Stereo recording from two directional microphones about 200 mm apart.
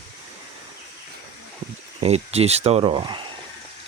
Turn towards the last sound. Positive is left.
turn(degrees=-25)  # may be behind; listen again after turning